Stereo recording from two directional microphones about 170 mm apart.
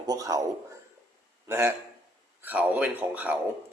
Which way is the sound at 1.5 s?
15° right (ahead or behind).